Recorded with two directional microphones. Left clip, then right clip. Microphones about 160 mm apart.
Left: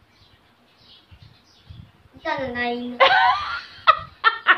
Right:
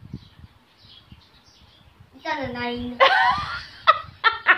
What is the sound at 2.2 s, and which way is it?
Wail, 5° left (ahead or behind).